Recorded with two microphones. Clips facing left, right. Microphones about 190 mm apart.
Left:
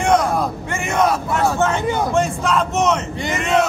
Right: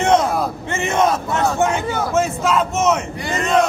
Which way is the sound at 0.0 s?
25° right (ahead or behind).